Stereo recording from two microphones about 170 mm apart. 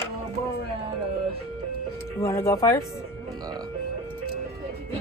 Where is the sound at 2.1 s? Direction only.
15° left (ahead or behind).